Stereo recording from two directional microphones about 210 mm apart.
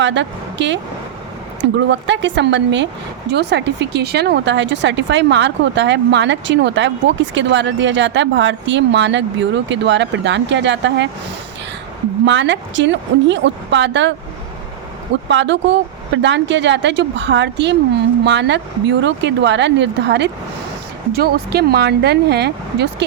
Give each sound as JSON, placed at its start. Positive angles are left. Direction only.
{"t": 0.0, "sound": "speech", "side_deg": -60}
{"t": 1.9, "sound": "speech", "side_deg": -60}
{"t": 12.2, "sound": "speech", "side_deg": -60}
{"t": 15.3, "sound": "speech", "side_deg": -60}